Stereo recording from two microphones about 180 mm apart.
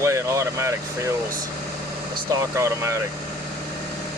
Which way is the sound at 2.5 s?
15° right (ahead or behind).